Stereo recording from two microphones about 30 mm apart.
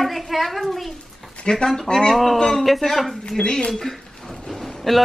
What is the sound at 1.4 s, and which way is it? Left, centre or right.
Speech, left.